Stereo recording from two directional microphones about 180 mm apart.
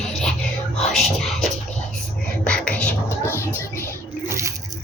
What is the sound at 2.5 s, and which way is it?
Whispering, 5° left (ahead or behind).